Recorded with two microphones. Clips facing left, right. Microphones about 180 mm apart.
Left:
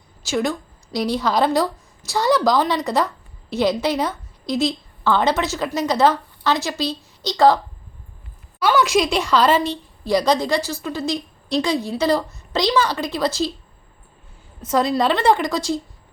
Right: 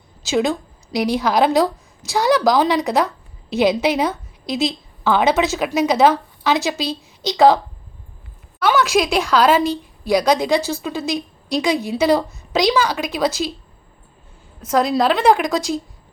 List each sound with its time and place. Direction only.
0.3 s a woman's voice: 20° right (ahead or behind)
8.6 s a woman's voice: 5° right (ahead or behind)
14.6 s a woman's voice: centre (ahead or behind); by 15.8 s 15° right (ahead or behind)